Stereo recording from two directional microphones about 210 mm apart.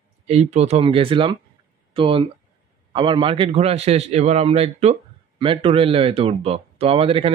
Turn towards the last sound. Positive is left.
turn(degrees=-25)  # may be behind; listen again after turning